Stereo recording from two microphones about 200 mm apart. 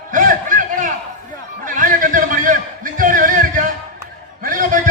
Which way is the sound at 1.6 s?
40° right (ahead or behind).